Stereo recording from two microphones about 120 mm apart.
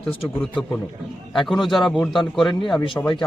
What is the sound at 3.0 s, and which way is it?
Speech, 20° left (ahead or behind).